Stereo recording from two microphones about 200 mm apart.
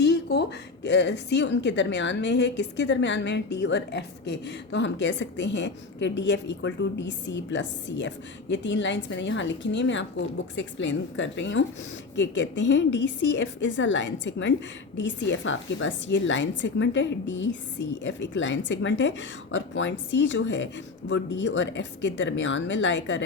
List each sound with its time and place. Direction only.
0.0 s a woman's voice: 55° left (ahead or behind)